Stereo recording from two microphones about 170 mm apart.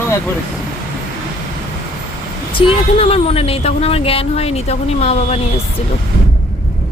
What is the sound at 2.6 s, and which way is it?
A woman's voice, 35° left (ahead or behind).